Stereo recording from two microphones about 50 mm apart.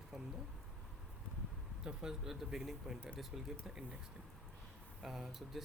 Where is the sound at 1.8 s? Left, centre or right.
Centre.